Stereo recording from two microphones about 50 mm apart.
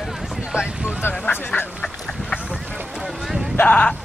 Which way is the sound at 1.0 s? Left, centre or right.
Left.